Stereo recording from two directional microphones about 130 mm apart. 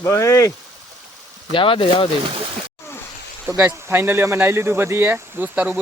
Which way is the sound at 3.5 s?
20° right (ahead or behind).